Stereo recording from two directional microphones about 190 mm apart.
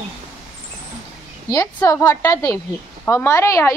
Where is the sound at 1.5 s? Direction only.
20° left (ahead or behind).